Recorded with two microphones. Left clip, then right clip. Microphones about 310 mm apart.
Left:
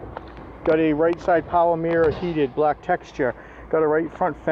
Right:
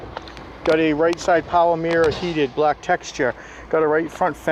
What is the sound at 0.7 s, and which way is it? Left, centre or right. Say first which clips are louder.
Speech: right 1 dB; centre.